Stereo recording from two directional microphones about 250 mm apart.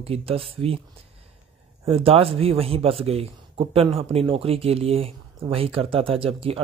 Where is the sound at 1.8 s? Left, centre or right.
Right.